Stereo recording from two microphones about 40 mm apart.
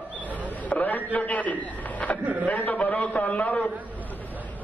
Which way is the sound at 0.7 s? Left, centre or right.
Left.